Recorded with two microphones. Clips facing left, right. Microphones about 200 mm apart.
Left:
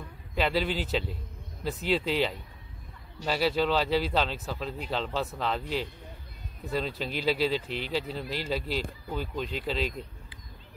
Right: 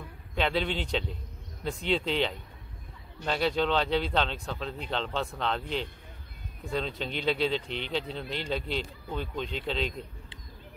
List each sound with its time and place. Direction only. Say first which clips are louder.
0.3 s speech: left 1 dB; centre (ahead or behind)